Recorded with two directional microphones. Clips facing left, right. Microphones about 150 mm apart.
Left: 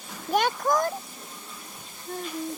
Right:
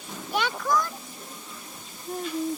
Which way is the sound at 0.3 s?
45° left (ahead or behind).